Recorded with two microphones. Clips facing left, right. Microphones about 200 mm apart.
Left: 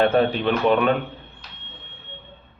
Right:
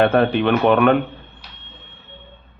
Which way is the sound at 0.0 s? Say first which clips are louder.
Right 3 dB; 65° right (ahead or behind).